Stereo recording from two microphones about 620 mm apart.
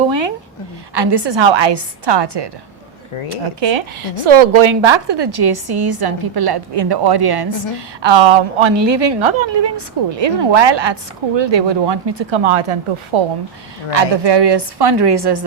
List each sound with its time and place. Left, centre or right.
0.1 s a sound: right
0.9 s a woman's voice: right
13.9 s a woman's voice: right